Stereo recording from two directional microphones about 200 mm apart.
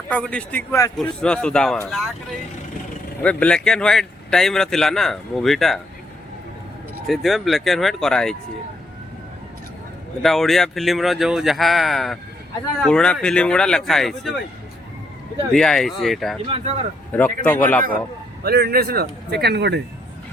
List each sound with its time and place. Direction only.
0.1 s a man's voice: 5° left (ahead or behind)
3.2 s a man's voice: 5° left (ahead or behind)
7.1 s a man's voice: centre (ahead or behind)
10.2 s a man's voice: centre (ahead or behind)
15.5 s a man's voice: 5° left (ahead or behind)
18.4 s speech: 50° right (ahead or behind)